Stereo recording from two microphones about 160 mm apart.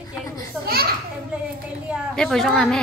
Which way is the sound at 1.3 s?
5° right (ahead or behind).